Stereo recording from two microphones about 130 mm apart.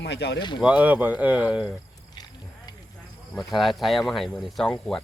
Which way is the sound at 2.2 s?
35° left (ahead or behind).